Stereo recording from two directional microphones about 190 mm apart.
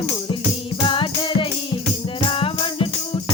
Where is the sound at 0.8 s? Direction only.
25° left (ahead or behind).